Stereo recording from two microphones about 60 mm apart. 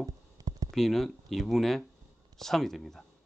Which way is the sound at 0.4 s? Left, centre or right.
Right.